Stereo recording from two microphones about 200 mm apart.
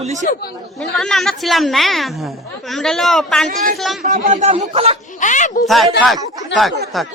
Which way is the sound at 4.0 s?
40° right (ahead or behind).